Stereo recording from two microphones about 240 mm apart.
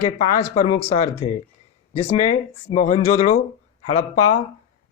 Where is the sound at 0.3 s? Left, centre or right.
Left.